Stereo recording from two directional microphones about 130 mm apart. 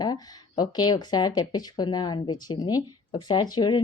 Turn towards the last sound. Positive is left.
turn(degrees=35)  # may be behind; listen again after turning